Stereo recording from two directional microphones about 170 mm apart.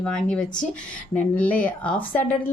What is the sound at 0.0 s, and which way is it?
A woman's voice, 5° left (ahead or behind).